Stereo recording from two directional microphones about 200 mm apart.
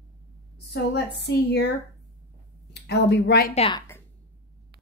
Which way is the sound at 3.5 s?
30° left (ahead or behind).